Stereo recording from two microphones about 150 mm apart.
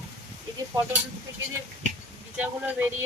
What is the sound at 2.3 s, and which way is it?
Speech, 10° right (ahead or behind).